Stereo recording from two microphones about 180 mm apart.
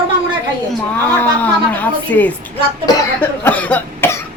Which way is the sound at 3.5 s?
10° left (ahead or behind).